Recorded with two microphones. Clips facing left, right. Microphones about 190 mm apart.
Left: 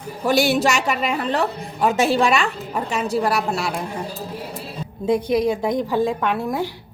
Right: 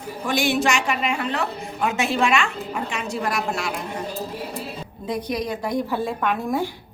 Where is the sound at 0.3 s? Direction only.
40° left (ahead or behind).